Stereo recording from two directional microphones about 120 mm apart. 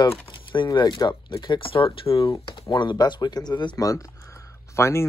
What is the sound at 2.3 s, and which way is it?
Speech, 35° left (ahead or behind).